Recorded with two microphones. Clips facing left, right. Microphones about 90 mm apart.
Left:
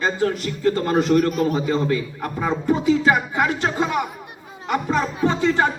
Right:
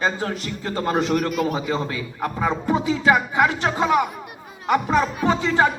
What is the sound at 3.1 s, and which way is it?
Speech, 30° right (ahead or behind).